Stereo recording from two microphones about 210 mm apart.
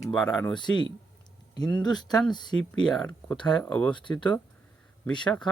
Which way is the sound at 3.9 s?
20° left (ahead or behind).